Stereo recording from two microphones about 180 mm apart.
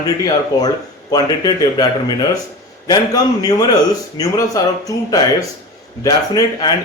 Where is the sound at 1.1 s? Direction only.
20° left (ahead or behind).